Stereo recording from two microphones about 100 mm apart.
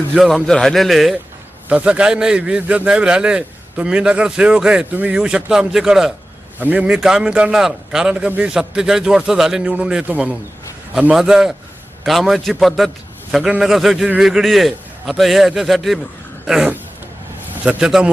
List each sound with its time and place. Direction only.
0.1 s a man's voice: 5° right (ahead or behind)
1.7 s a man's voice: 10° right (ahead or behind)
6.6 s a man's voice: 15° right (ahead or behind)